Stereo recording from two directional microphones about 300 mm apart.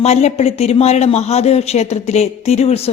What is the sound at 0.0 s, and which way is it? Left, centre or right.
Speech, left.